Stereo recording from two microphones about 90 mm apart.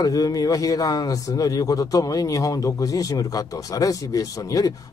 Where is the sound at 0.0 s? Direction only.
45° left (ahead or behind).